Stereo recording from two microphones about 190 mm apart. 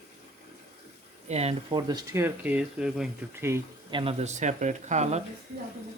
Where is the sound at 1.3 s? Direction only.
35° right (ahead or behind).